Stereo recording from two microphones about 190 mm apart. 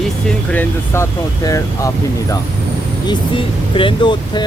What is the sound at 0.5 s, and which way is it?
Speech, 10° left (ahead or behind).